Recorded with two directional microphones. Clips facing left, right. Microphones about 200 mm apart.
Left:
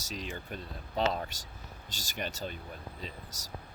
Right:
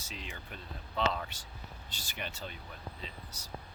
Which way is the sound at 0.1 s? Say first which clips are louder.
Left 7 dB; 40° left (ahead or behind).